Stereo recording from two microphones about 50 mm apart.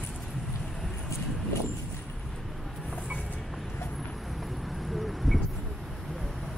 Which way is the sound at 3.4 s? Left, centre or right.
Centre.